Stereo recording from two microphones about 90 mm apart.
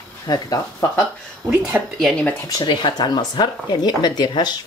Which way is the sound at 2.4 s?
50° left (ahead or behind).